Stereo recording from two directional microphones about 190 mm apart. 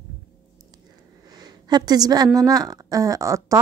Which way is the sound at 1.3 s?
20° right (ahead or behind).